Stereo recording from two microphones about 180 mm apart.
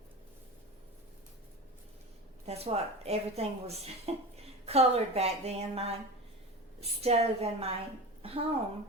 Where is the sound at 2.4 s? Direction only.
35° right (ahead or behind).